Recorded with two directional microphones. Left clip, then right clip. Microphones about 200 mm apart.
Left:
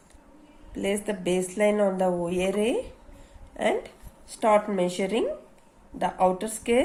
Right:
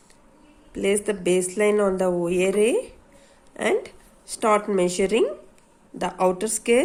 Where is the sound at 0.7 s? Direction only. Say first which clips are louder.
Right 5 dB; 40° right (ahead or behind).